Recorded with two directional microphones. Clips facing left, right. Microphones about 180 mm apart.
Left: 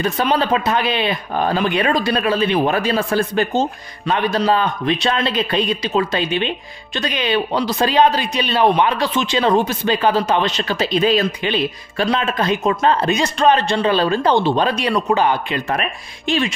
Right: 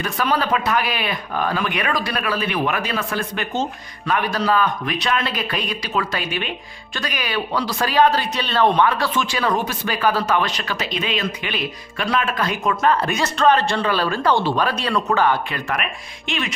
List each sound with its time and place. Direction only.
0.0 s speech: 25° left (ahead or behind)
15.8 s speech: 35° left (ahead or behind)